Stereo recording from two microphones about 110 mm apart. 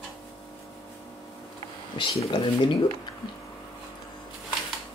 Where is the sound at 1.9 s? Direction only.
50° left (ahead or behind).